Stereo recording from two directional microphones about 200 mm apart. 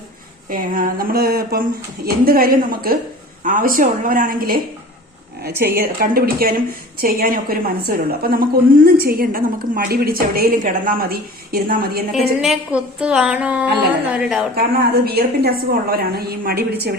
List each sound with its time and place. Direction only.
0.5 s a woman's voice: 45° right (ahead or behind)
12.4 s a woman's voice: 5° right (ahead or behind)
14.5 s a woman's voice: 50° right (ahead or behind)